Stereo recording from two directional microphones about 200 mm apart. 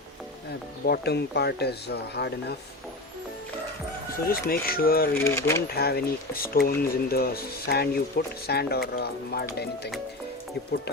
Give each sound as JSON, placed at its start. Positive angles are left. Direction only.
{"t": 0.9, "sound": "speech", "side_deg": 55}
{"t": 4.3, "sound": "speech", "side_deg": 45}
{"t": 5.1, "sound": "speech", "side_deg": 10}
{"t": 5.7, "sound": "speech", "side_deg": 50}